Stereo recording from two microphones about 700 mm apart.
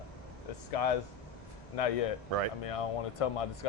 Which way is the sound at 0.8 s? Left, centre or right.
Left.